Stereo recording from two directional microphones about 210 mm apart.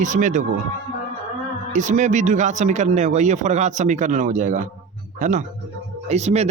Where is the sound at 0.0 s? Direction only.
35° right (ahead or behind).